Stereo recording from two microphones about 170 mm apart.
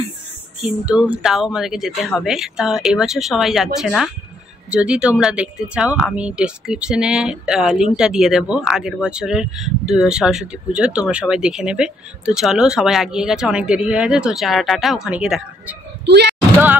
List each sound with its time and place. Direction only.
0.6 s a sound: 5° right (ahead or behind)
1.2 s speech: centre (ahead or behind)
16.1 s speech: 80° right